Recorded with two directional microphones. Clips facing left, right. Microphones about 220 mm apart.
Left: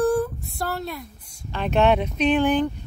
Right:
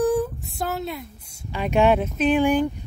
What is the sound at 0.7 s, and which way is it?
Speech, 20° right (ahead or behind).